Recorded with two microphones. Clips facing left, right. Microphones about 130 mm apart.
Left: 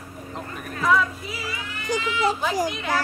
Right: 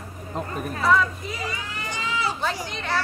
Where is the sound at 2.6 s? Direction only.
10° left (ahead or behind).